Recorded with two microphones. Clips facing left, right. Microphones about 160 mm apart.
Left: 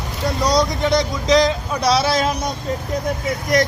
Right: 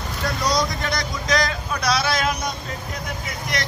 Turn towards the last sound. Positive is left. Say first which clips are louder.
# left 11 dB
turn(degrees=45)  # may be behind; listen again after turning